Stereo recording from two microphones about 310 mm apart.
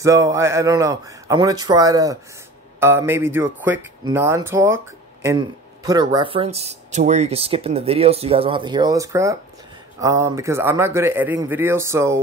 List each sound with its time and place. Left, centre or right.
0.0 s speech: centre